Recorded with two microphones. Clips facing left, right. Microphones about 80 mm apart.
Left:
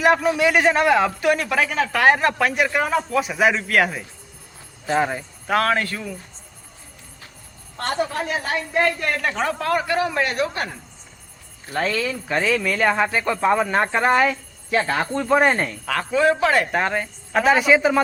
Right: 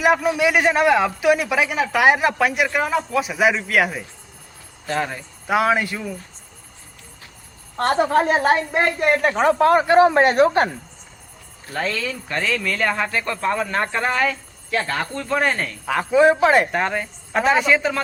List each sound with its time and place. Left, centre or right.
0.0 s speech: centre
4.9 s speech: centre
5.5 s speech: centre
7.8 s a woman's voice: right
11.7 s speech: centre; by 15.8 s left
15.9 s a woman's voice: centre
16.7 s speech: centre